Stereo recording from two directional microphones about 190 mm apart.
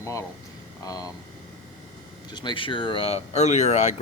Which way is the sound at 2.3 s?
25° left (ahead or behind).